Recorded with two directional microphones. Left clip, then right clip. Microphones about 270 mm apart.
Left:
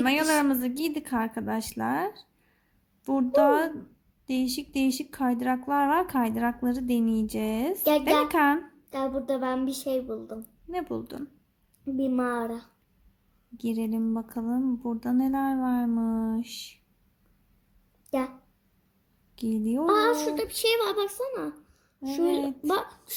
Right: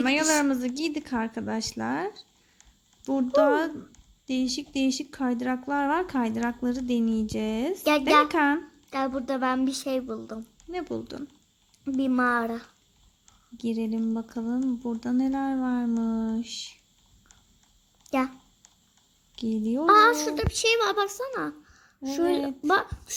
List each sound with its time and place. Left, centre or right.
0.0 s speech: centre
8.9 s a child's voice: right
10.7 s speech: centre
11.9 s a child's voice: right
13.6 s speech: centre
19.4 s speech: centre
19.9 s a child's voice: right